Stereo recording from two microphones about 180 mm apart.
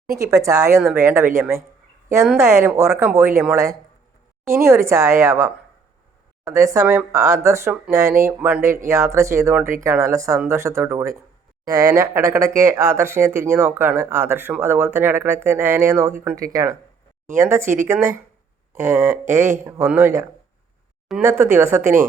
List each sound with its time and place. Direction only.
0.1 s speech: 15° right (ahead or behind)